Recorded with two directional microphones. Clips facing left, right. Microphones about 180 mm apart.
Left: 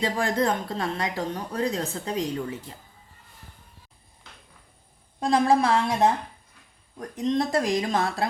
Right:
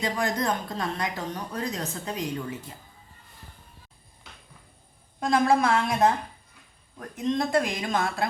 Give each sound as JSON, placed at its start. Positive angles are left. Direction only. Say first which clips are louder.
{"t": 0.0, "sound": "speech", "louder": "left 3 dB", "side_deg": 30}
{"t": 5.2, "sound": "speech", "louder": "left 1 dB", "side_deg": 30}